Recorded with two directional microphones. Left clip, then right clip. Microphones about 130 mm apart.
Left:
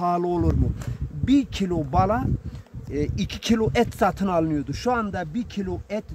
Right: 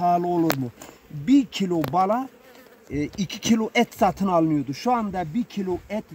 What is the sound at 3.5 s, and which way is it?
Speech, 15° left (ahead or behind).